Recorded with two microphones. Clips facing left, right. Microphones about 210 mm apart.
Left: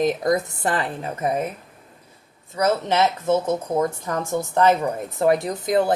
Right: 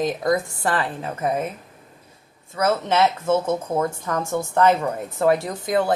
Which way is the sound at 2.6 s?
15° left (ahead or behind).